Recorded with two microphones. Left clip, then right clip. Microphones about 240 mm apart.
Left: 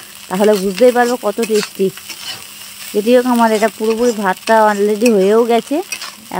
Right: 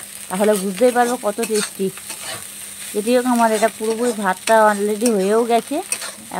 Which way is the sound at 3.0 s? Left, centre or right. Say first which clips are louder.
Left 5 dB; left.